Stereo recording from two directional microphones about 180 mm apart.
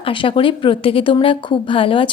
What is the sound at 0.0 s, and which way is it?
A woman's voice, 30° left (ahead or behind).